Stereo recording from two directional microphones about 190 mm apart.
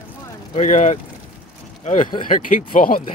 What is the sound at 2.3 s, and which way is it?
Speech, 45° left (ahead or behind).